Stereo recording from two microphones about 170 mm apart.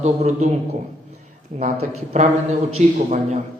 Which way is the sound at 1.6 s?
40° right (ahead or behind).